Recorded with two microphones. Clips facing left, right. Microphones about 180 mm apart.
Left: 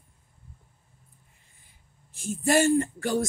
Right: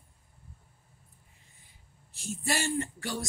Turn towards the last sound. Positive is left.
turn(degrees=50)  # may be behind; listen again after turning